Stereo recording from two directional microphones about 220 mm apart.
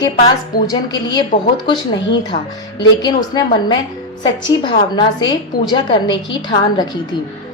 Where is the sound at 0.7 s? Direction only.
20° left (ahead or behind).